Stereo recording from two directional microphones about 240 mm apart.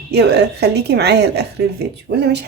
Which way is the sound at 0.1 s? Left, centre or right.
Right.